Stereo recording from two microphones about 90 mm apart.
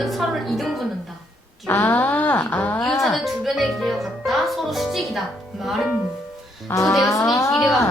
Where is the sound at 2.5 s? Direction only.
15° left (ahead or behind).